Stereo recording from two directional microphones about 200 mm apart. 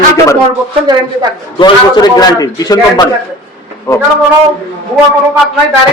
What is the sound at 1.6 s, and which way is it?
A man's voice, 20° left (ahead or behind).